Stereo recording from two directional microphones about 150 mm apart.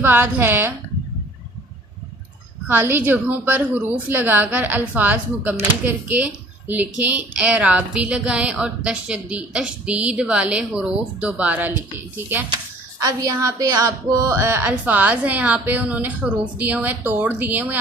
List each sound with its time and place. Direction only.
0.0 s a woman's voice: 15° right (ahead or behind)
2.6 s a woman's voice: 15° right (ahead or behind)